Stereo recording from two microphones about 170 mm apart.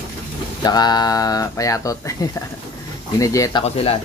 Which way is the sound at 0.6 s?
25° left (ahead or behind).